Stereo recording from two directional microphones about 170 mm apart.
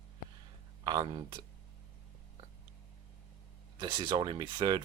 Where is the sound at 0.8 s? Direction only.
25° right (ahead or behind).